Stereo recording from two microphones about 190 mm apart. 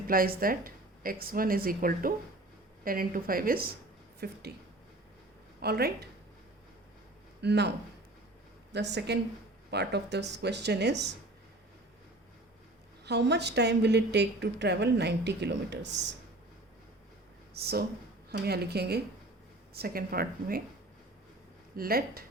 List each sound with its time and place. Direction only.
0.1 s a woman's voice: 50° right (ahead or behind)
5.6 s a woman's voice: 55° right (ahead or behind)
7.4 s a woman's voice: 60° right (ahead or behind)
8.7 s a woman's voice: 65° right (ahead or behind)
13.1 s a woman's voice: 65° right (ahead or behind)
17.6 s a woman's voice: 55° right (ahead or behind)
21.8 s speech: 50° right (ahead or behind)